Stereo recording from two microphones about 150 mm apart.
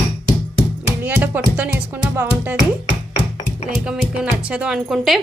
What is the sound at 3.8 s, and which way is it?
Speech, 5° right (ahead or behind).